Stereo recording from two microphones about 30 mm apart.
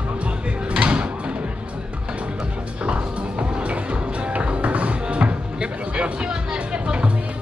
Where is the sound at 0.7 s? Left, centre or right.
Right.